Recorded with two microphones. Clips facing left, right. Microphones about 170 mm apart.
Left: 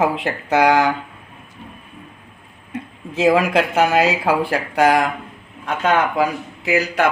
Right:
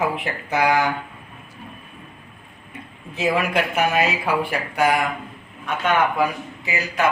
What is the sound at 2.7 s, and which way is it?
A man's voice, 90° left.